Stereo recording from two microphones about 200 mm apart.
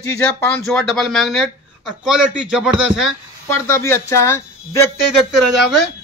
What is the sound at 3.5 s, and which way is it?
Speech, 10° left (ahead or behind).